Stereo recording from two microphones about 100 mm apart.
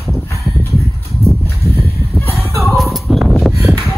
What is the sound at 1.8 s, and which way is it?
Fowl, 25° left (ahead or behind).